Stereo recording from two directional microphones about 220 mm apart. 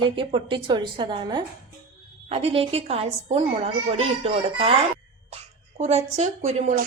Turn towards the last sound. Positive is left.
turn(degrees=-30)  # may be behind; listen again after turning